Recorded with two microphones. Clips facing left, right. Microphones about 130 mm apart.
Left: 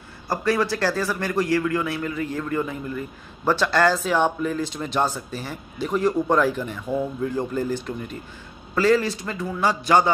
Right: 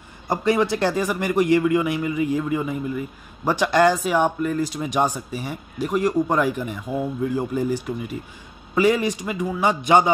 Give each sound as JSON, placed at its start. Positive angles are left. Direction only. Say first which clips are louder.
{"t": 0.3, "sound": "a man's voice", "louder": "right 2 dB", "side_deg": -20}